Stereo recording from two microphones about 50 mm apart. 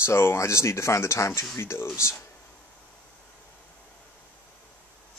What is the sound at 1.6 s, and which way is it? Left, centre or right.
Speech, left.